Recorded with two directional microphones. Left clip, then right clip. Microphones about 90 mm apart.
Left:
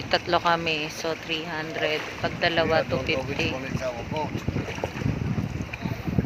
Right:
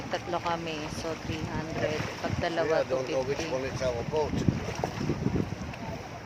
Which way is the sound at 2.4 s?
30° left (ahead or behind).